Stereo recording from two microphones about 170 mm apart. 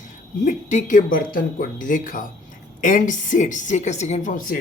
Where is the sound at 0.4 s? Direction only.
45° left (ahead or behind).